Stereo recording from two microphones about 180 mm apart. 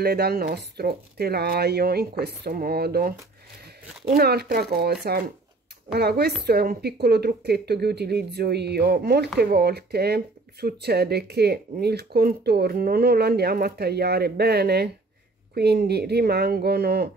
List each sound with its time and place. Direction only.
0.0 s speech: 60° right (ahead or behind)
4.2 s speech: 60° right (ahead or behind)
5.9 s speech: 60° right (ahead or behind)